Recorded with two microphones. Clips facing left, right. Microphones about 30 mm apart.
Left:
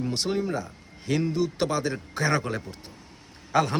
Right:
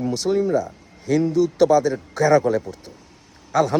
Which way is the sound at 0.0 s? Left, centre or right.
Left.